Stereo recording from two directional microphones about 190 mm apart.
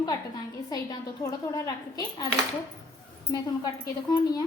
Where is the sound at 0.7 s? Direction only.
20° left (ahead or behind).